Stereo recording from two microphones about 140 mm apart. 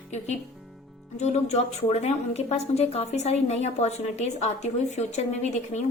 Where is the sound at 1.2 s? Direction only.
55° left (ahead or behind).